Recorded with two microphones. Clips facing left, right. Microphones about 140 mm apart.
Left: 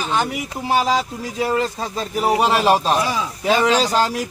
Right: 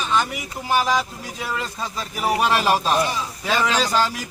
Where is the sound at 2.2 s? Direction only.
30° left (ahead or behind).